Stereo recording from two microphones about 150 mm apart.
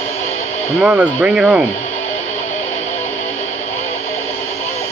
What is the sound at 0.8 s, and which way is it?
Speech, 10° right (ahead or behind).